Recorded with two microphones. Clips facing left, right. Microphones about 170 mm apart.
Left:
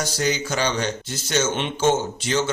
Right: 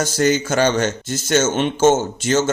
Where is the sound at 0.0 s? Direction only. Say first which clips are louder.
Right 6 dB; 50° right (ahead or behind).